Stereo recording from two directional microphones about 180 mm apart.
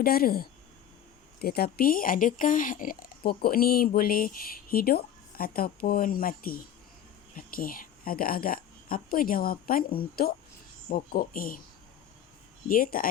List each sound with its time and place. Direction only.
0.0 s speech: 55° left (ahead or behind)
12.6 s speech: 50° left (ahead or behind)